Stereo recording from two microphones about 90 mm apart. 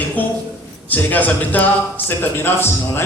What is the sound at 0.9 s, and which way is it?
A man's voice, 20° left (ahead or behind).